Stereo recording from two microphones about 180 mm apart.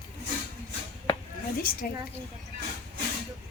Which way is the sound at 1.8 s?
55° left (ahead or behind).